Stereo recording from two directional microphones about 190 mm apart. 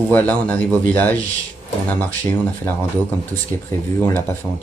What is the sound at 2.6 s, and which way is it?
A man's voice, 10° left (ahead or behind).